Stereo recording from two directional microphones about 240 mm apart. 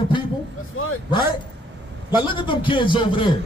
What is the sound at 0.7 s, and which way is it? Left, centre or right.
Speech, left.